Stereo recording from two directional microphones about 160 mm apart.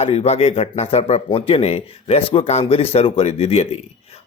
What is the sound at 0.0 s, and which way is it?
Speech, 40° left (ahead or behind).